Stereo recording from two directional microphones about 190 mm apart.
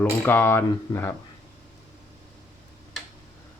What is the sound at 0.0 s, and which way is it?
Speech, 10° left (ahead or behind).